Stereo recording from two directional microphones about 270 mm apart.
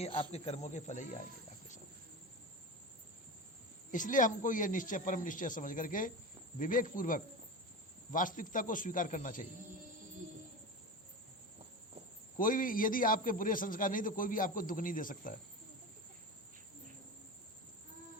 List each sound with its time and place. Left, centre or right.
0.0 s speech: left
3.9 s a man's voice: left
12.4 s a man's voice: left